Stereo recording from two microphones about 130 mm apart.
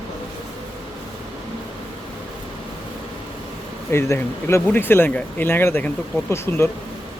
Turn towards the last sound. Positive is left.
turn(degrees=20)  # may be behind; listen again after turning